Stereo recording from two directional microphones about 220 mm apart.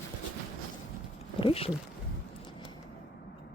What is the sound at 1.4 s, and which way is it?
Speech, 25° left (ahead or behind).